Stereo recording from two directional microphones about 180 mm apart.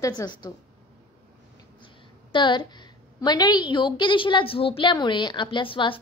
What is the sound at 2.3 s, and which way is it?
A woman's voice, 25° left (ahead or behind).